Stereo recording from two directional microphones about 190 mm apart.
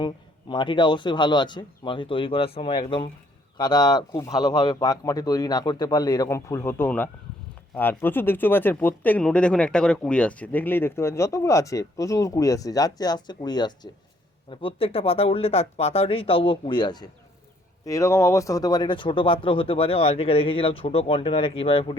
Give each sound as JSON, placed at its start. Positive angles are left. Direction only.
{"t": 0.0, "sound": "speech", "side_deg": 25}